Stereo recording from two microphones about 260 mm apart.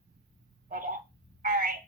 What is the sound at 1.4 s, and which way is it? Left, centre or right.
Telephone, right.